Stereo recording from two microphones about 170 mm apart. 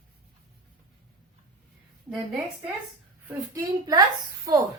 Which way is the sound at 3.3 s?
20° right (ahead or behind).